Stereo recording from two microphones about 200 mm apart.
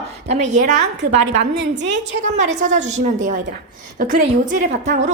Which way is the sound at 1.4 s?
60° right (ahead or behind).